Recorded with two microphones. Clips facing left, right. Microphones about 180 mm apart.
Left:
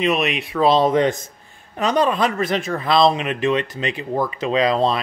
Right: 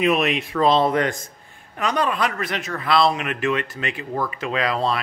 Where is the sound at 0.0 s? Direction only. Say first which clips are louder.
Even; centre (ahead or behind).